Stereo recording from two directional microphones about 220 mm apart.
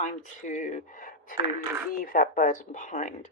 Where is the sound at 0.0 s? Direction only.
35° left (ahead or behind).